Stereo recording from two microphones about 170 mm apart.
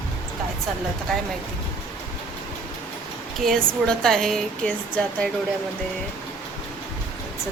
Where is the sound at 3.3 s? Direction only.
Centre (ahead or behind).